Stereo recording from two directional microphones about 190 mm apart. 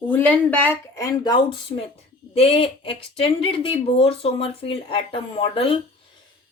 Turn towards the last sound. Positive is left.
turn(degrees=30)  # may be behind; listen again after turning